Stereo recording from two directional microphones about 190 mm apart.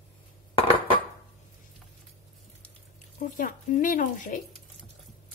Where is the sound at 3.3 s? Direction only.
45° left (ahead or behind).